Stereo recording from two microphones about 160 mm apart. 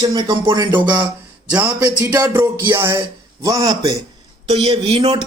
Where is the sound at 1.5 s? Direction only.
10° right (ahead or behind).